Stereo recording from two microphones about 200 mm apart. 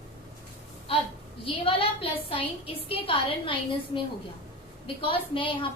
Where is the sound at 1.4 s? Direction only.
25° left (ahead or behind).